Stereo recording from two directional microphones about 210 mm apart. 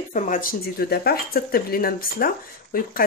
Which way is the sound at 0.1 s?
35° left (ahead or behind).